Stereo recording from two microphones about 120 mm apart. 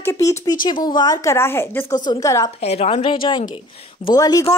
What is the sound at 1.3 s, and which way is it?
Speech, 20° left (ahead or behind).